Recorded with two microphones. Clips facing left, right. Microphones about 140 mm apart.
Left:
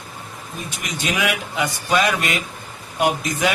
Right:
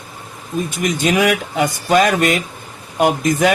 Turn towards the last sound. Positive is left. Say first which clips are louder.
# right 6 dB
turn(degrees=-45)  # may be behind; listen again after turning